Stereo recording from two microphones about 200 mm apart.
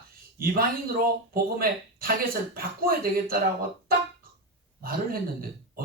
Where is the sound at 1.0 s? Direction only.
45° right (ahead or behind).